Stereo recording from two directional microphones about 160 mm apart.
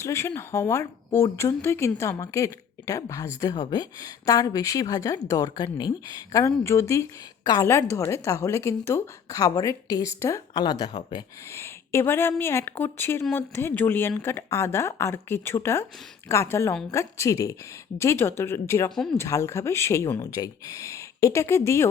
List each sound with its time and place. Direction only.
0.0 s speech: 15° left (ahead or behind)